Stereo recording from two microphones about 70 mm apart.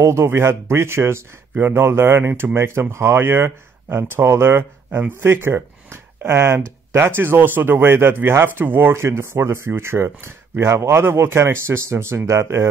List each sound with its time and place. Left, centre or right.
0.0 s a man's voice: right